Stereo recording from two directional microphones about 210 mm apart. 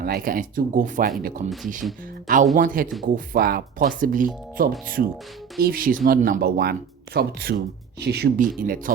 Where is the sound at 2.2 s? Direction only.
40° right (ahead or behind).